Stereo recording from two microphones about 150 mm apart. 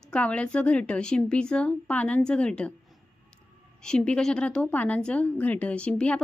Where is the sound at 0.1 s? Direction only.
10° left (ahead or behind).